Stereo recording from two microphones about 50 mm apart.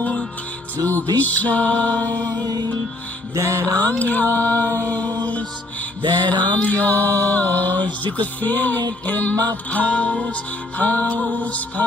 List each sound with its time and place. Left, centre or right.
0.8 s music: left
3.3 s music: right
3.6 s music: left
4.0 s speech: left
6.2 s music: left